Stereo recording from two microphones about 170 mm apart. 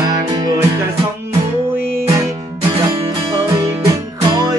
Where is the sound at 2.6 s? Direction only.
25° right (ahead or behind).